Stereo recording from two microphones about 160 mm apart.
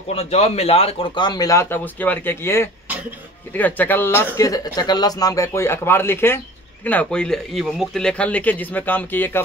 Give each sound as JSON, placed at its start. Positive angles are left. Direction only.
{"t": 0.1, "sound": "speech", "side_deg": 40}